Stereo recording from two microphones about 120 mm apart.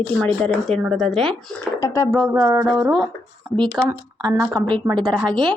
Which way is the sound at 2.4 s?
30° right (ahead or behind).